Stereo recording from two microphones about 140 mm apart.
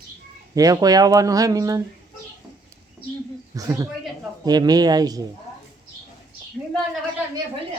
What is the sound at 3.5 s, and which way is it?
A man's voice, 25° right (ahead or behind).